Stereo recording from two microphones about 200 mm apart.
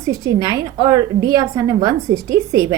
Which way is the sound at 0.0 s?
15° right (ahead or behind).